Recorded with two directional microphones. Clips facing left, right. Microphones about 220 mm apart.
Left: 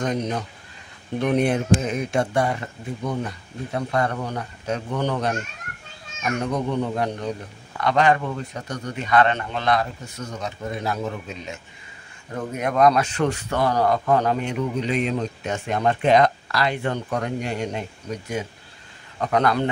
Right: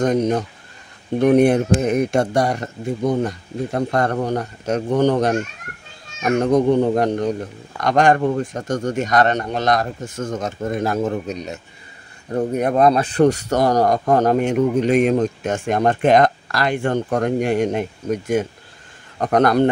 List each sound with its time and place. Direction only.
0.0 s speech: 45° right (ahead or behind)
2.1 s speech: 40° right (ahead or behind)